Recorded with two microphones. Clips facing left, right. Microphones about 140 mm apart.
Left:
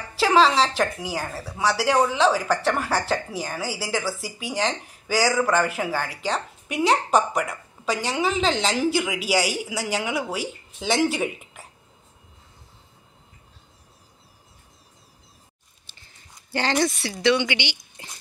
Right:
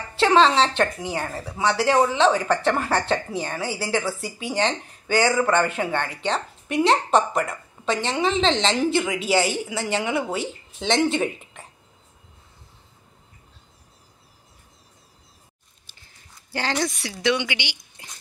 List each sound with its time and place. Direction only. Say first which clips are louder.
0.1 s speech: right 1 dB; 5° left (ahead or behind)
16.7 s speech: left 4 dB; 10° left (ahead or behind)
17.1 s a woman's voice: left 1 dB; 15° right (ahead or behind)